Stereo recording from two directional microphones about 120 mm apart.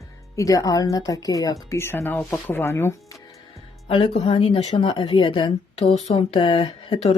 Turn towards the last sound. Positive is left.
turn(degrees=55)  # may be behind; listen again after turning